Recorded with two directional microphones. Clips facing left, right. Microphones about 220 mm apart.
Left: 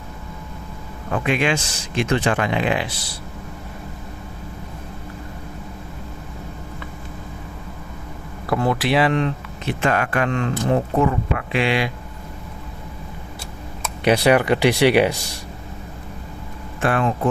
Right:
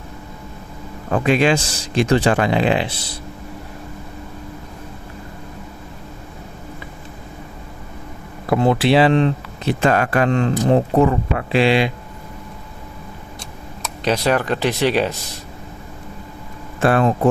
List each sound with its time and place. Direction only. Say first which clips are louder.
1.1 s speech: right 5 dB; 35° right (ahead or behind)
8.4 s speech: right 5 dB; 25° right (ahead or behind)
14.1 s speech: left 3 dB; 15° left (ahead or behind)
16.8 s speech: right 4 dB; 35° right (ahead or behind)